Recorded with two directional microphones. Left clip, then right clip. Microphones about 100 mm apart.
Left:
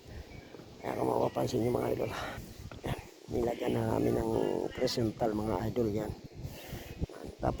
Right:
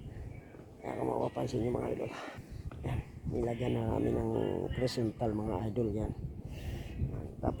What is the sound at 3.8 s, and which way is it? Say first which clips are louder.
Speech: left 3 dB; 10° left (ahead or behind).